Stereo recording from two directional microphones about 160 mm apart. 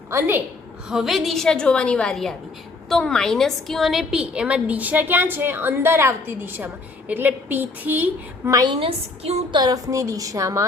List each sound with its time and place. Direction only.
0.1 s a woman's voice: 15° right (ahead or behind)
0.9 s a woman's voice: centre (ahead or behind)
8.5 s a woman's voice: 30° right (ahead or behind)
9.6 s a woman's voice: 25° right (ahead or behind)